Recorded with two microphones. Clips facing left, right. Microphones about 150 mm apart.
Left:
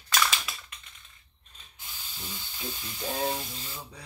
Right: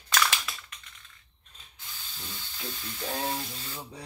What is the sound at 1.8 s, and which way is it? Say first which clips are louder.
Speech: left 1 dB; 15° left (ahead or behind).